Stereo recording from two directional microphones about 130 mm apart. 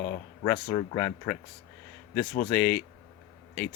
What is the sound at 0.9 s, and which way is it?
Speech, 20° left (ahead or behind).